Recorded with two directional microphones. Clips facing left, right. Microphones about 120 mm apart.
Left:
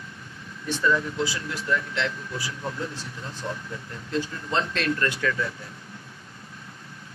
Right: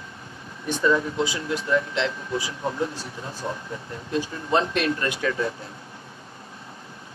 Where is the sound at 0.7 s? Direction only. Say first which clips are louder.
Right 3 dB; 20° right (ahead or behind).